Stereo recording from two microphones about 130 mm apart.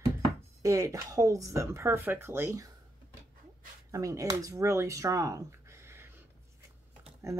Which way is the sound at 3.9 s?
25° right (ahead or behind).